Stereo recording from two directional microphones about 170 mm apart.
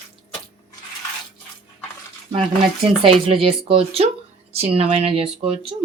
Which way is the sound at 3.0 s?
30° right (ahead or behind).